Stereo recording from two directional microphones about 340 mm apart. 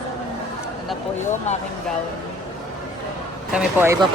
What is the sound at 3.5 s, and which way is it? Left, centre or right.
Speech, centre.